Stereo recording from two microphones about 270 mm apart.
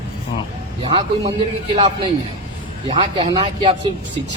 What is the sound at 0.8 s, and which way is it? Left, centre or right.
Speech, right.